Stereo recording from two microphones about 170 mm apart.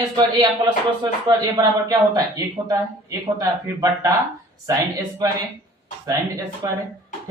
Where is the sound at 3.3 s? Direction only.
20° right (ahead or behind).